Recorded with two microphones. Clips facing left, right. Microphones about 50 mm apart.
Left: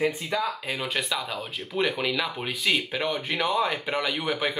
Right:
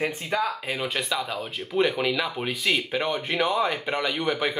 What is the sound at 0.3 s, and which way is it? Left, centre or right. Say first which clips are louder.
Speech: right 5 dB; right.